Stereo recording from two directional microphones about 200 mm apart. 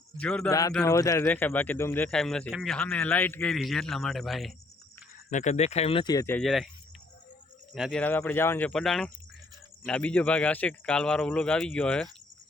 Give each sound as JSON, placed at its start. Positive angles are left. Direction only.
{"t": 0.2, "sound": "a man's voice", "side_deg": 5}
{"t": 0.9, "sound": "speech", "side_deg": 15}
{"t": 5.3, "sound": "speech", "side_deg": 35}
{"t": 6.4, "sound": "a man's voice", "side_deg": 0}
{"t": 7.7, "sound": "a man's voice", "side_deg": 0}